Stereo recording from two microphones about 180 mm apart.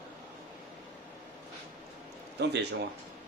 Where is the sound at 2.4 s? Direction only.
65° right (ahead or behind).